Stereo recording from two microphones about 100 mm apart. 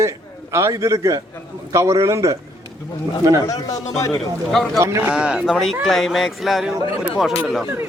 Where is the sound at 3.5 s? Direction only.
35° left (ahead or behind).